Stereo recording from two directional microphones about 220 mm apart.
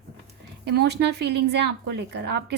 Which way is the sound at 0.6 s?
50° right (ahead or behind).